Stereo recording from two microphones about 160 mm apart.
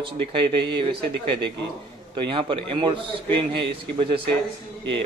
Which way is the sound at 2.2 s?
30° right (ahead or behind).